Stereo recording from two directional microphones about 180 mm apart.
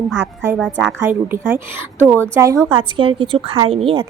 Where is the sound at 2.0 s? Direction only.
10° left (ahead or behind).